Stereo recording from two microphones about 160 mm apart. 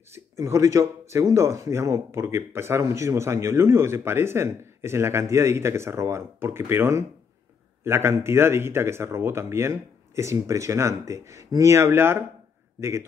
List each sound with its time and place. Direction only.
0.1 s speech: 20° right (ahead or behind)